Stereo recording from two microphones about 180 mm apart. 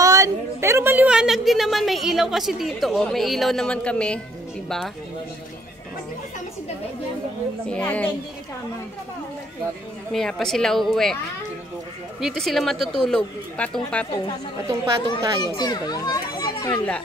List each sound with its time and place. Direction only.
0.0 s a woman's voice: 20° right (ahead or behind); by 4.9 s centre (ahead or behind)
7.7 s a woman's voice: 10° left (ahead or behind)
10.1 s speech: centre (ahead or behind)
12.2 s speech: centre (ahead or behind)
15.0 s a child's voice: 20° left (ahead or behind)
16.7 s speech: 5° left (ahead or behind)